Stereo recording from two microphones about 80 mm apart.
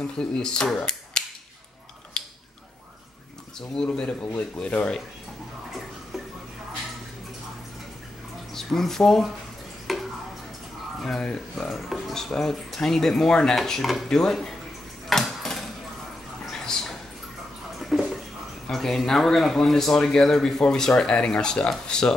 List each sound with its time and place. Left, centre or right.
0.0 s speech: centre
2.1 s scissors: centre
3.7 s speech: centre
8.5 s speech: centre
9.9 s tick: centre
11.0 s speech: centre
15.0 s a sound: centre
18.7 s speech: centre